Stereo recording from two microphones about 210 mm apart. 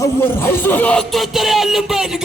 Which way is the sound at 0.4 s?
10° left (ahead or behind).